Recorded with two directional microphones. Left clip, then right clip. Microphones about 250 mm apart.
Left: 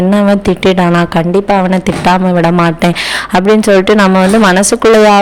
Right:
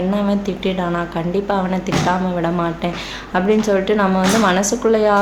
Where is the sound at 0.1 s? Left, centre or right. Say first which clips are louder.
Left 10 dB; left.